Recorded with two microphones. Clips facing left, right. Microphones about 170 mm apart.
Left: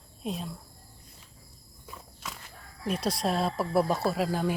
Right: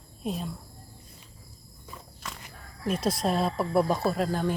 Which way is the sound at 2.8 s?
Centre (ahead or behind).